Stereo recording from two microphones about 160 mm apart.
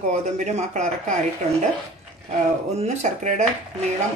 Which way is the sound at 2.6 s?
45° right (ahead or behind).